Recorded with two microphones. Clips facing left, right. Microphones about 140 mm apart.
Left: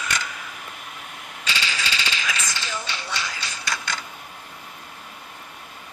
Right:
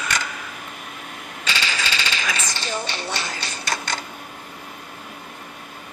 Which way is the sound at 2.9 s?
60° right (ahead or behind).